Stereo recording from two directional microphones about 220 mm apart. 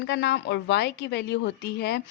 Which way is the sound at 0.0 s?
50° left (ahead or behind).